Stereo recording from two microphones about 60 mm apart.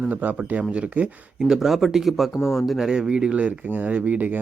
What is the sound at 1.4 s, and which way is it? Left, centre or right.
Speech, centre.